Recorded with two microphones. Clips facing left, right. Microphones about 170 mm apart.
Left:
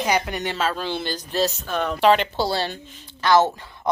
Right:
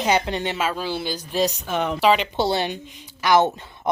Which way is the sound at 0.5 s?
10° right (ahead or behind).